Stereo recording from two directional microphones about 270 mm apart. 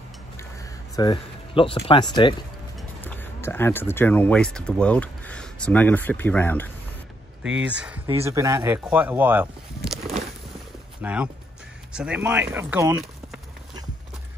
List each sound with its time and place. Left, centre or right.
0.4 s a sound: centre
3.0 s speech: centre
7.4 s speech: centre